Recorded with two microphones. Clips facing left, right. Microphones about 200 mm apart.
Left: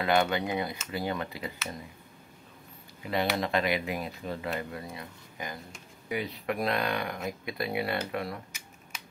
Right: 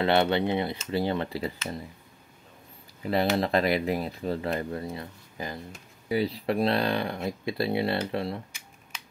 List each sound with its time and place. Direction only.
0.0 s speech: 30° right (ahead or behind)
3.1 s speech: 35° right (ahead or behind)